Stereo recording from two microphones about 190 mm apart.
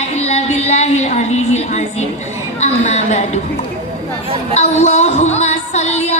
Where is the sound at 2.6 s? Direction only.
40° left (ahead or behind).